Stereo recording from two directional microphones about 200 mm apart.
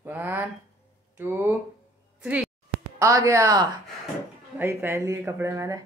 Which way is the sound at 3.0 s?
15° right (ahead or behind).